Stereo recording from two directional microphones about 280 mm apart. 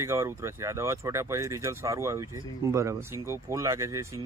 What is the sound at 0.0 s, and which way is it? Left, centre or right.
A man's voice, centre.